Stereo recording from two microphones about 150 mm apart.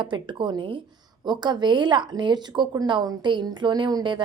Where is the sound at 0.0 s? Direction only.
30° right (ahead or behind).